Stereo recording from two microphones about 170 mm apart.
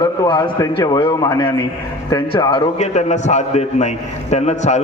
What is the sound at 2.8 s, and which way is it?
A man's voice, 40° left (ahead or behind).